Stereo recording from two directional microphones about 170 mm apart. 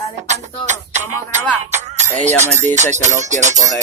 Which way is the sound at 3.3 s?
45° right (ahead or behind).